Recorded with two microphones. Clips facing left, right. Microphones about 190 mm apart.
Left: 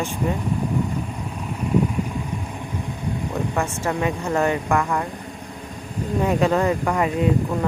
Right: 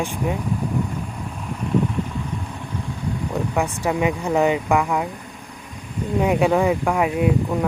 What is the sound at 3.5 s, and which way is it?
Speech, 15° right (ahead or behind).